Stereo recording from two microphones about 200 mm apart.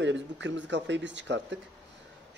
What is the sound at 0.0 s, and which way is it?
Speech, 65° right (ahead or behind).